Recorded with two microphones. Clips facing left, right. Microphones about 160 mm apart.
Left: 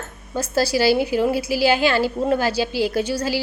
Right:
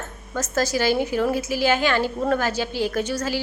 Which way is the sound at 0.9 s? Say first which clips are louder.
Left 2 dB; 15° left (ahead or behind).